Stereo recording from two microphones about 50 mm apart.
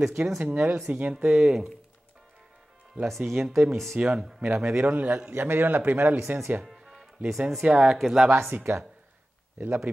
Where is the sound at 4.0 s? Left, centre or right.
Right.